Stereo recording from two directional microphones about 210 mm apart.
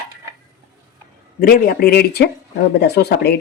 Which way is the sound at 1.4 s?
45° left (ahead or behind).